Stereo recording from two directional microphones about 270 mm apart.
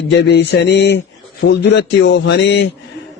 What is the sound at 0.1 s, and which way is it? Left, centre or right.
A man's voice, left.